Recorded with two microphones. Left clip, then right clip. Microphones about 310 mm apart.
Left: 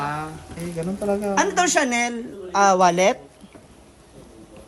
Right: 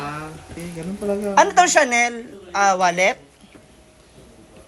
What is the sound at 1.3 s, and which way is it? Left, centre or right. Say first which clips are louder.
Speech: right 7 dB; centre.